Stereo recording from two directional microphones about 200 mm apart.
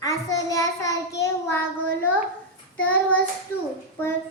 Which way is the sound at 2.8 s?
5° left (ahead or behind).